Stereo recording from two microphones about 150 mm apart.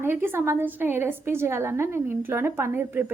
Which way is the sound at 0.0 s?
15° right (ahead or behind).